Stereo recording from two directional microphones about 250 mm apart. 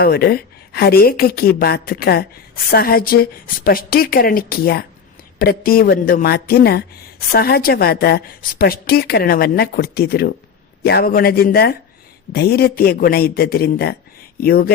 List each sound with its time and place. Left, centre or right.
0.0 s a woman's voice: left